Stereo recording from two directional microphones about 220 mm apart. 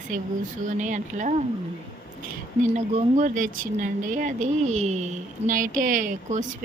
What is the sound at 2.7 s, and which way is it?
A woman's voice, 35° right (ahead or behind).